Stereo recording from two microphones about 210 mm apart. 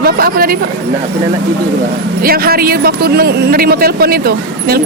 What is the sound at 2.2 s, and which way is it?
Speech, 45° right (ahead or behind).